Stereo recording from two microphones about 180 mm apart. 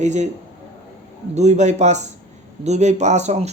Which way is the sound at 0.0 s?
40° right (ahead or behind).